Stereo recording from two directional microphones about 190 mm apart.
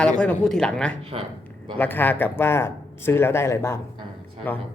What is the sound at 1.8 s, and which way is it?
Speech, 10° left (ahead or behind).